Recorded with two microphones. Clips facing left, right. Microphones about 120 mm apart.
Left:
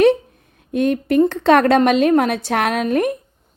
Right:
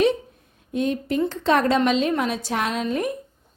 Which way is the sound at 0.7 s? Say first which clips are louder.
Left 6 dB; 60° left (ahead or behind).